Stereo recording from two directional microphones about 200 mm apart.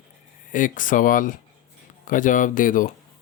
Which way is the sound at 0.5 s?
40° left (ahead or behind).